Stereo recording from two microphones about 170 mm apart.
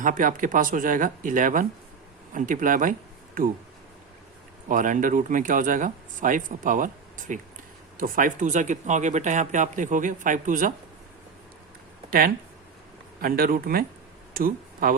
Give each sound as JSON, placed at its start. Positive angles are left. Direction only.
{"t": 0.0, "sound": "speech", "side_deg": -50}
{"t": 4.7, "sound": "speech", "side_deg": -50}
{"t": 13.2, "sound": "speech", "side_deg": -60}